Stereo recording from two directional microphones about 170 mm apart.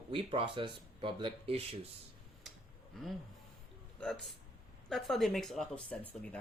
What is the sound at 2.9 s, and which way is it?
Speech, centre (ahead or behind).